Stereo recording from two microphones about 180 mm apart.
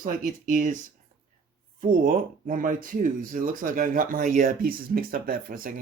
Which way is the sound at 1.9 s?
50° right (ahead or behind).